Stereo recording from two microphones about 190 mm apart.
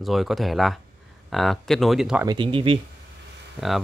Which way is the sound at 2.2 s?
25° right (ahead or behind).